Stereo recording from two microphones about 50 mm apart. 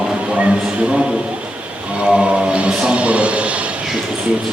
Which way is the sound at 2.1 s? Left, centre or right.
Right.